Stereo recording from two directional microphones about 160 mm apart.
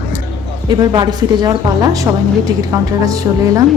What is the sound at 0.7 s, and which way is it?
A woman's voice, 25° right (ahead or behind).